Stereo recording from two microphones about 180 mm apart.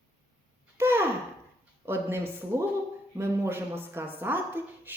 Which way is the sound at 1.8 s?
10° right (ahead or behind).